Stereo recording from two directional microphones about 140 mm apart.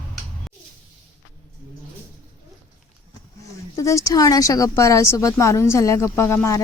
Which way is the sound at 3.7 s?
20° left (ahead or behind).